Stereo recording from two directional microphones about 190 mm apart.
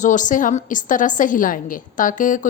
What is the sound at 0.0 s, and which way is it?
A woman's voice, 40° left (ahead or behind).